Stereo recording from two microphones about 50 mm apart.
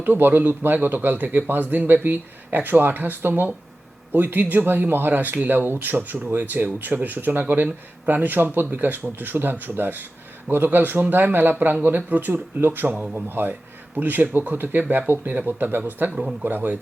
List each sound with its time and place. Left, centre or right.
0.0 s speech: right